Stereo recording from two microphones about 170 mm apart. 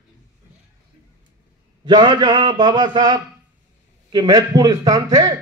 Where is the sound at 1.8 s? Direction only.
25° right (ahead or behind).